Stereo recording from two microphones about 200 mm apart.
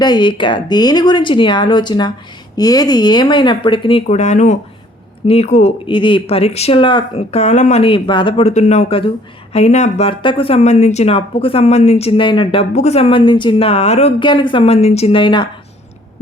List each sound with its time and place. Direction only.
0.0 s speech: 20° left (ahead or behind)